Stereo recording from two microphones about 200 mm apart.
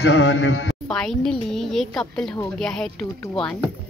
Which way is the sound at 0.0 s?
65° left (ahead or behind).